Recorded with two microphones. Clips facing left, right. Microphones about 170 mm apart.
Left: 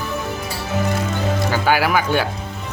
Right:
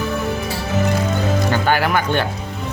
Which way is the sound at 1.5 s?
5° left (ahead or behind).